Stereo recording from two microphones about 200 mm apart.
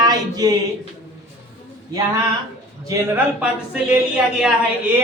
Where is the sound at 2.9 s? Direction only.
10° right (ahead or behind).